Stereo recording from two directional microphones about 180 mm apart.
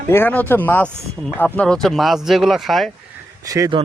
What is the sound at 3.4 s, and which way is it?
Speech, 20° right (ahead or behind).